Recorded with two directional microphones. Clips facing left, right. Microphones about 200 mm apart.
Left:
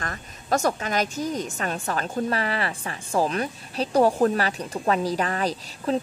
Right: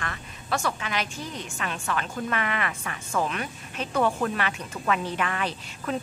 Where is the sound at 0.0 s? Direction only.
40° left (ahead or behind).